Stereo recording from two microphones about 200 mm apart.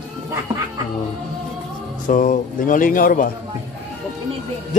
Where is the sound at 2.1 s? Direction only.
40° left (ahead or behind).